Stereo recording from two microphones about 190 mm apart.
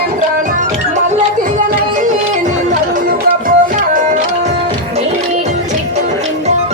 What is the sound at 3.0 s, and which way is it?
Music, 45° right (ahead or behind).